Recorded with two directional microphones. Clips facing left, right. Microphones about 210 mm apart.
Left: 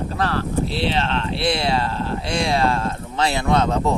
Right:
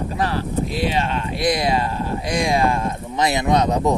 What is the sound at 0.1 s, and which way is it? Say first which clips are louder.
Speech: even; 15° right (ahead or behind).